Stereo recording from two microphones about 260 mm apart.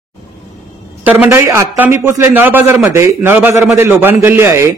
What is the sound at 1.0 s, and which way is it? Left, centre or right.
A man's voice, centre.